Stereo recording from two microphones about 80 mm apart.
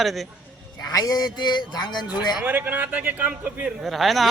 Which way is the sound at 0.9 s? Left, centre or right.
Left.